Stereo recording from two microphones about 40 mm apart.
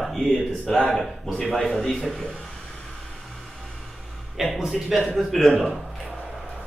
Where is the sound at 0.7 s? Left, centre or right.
Centre.